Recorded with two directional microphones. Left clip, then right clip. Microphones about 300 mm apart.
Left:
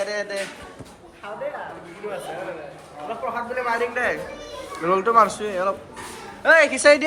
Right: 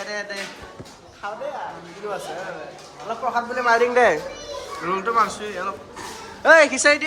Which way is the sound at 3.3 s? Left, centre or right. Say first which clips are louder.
Right 6 dB; centre.